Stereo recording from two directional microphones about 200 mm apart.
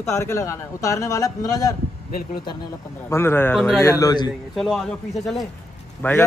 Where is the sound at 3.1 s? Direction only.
10° left (ahead or behind).